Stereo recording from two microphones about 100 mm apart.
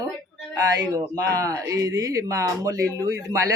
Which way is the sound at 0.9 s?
35° right (ahead or behind).